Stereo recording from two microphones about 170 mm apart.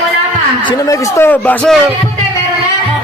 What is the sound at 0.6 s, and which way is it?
A man's voice, 20° left (ahead or behind).